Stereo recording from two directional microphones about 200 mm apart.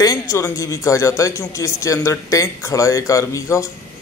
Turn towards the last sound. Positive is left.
turn(degrees=15)  # may be behind; listen again after turning